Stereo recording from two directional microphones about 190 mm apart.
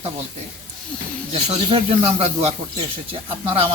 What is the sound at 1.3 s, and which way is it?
Speech, 30° right (ahead or behind).